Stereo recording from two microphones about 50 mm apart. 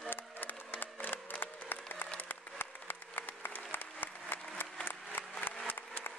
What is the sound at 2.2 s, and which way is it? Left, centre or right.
Applause, left.